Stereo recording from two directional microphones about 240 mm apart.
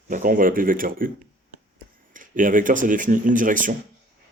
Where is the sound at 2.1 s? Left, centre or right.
Right.